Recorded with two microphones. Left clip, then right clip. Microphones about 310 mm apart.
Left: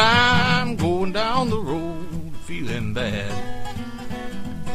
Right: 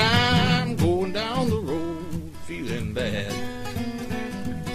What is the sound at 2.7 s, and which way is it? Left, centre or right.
Music, left.